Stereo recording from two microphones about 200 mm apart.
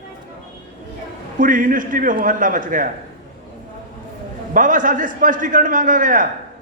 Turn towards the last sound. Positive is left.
turn(degrees=-40)  # may be behind; listen again after turning